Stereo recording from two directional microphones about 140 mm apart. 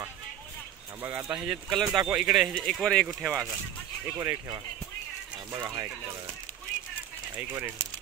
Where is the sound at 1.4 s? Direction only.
Centre (ahead or behind).